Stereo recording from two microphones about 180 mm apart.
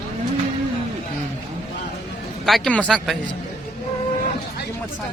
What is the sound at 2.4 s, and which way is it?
Speech, centre (ahead or behind).